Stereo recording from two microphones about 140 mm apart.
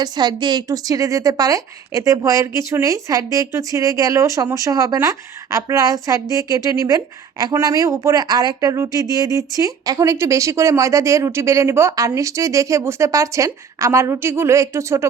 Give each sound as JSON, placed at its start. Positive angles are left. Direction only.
{"t": 0.0, "sound": "speech", "side_deg": -30}